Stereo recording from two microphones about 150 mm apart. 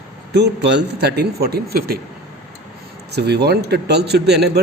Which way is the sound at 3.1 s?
90° right.